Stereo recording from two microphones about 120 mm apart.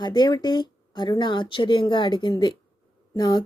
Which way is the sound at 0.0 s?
35° left (ahead or behind).